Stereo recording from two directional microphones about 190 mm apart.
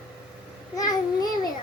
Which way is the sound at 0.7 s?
20° left (ahead or behind).